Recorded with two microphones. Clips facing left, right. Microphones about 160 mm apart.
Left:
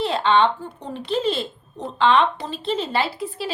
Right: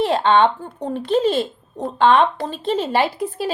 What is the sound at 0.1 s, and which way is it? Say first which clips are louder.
A woman's voice: right 3 dB; 45° right (ahead or behind).